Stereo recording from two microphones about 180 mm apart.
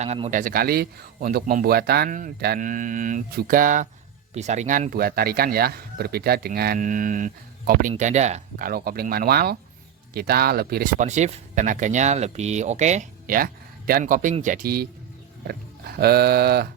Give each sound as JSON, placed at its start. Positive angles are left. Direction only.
{"t": 0.0, "sound": "speech", "side_deg": -40}